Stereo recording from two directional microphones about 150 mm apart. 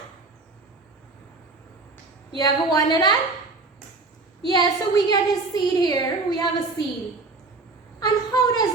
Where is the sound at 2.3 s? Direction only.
25° left (ahead or behind).